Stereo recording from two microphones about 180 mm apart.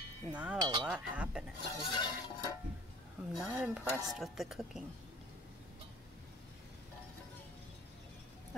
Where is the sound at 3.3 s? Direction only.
5° right (ahead or behind).